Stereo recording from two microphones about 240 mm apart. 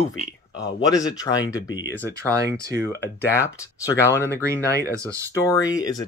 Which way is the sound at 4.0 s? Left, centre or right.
Centre.